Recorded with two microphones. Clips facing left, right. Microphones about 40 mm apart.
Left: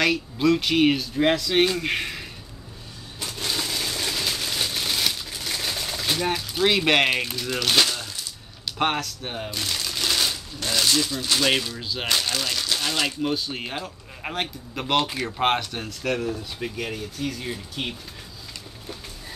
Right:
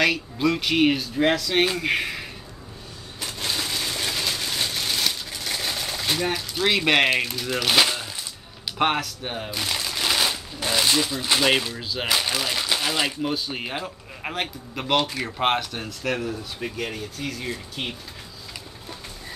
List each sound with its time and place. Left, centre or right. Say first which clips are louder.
0.0 s speech: even; centre
3.2 s a sound: even; centre
8.7 s a man's voice: right 2 dB; centre
14.3 s speech: even; centre